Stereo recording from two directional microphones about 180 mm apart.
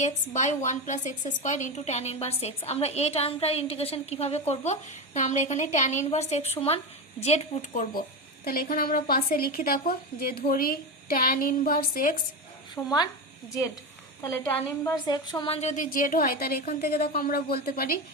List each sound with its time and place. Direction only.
0.0 s a woman's voice: 40° left (ahead or behind)
8.4 s a woman's voice: 55° left (ahead or behind)
12.8 s speech: 20° left (ahead or behind)
14.2 s a woman's voice: 20° left (ahead or behind); by 18.0 s 55° left (ahead or behind)